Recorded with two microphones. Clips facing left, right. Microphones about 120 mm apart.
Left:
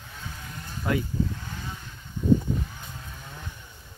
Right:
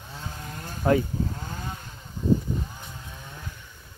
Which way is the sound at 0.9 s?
35° right (ahead or behind).